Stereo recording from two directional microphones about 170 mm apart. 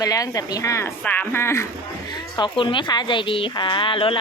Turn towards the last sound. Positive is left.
turn(degrees=30)  # may be behind; listen again after turning